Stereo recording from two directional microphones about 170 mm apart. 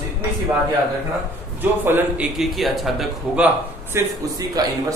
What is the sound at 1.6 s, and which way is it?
Speech, 10° right (ahead or behind).